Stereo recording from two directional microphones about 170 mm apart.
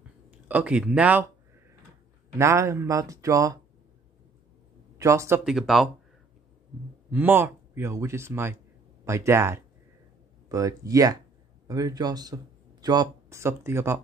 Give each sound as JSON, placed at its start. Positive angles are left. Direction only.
{"t": 0.3, "sound": "speech", "side_deg": -10}
{"t": 2.3, "sound": "speech", "side_deg": -15}
{"t": 4.9, "sound": "speech", "side_deg": -15}
{"t": 5.4, "sound": "speech", "side_deg": 0}
{"t": 7.1, "sound": "speech", "side_deg": -10}